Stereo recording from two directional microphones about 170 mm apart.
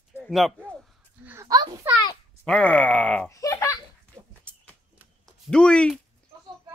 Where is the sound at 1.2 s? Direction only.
20° right (ahead or behind).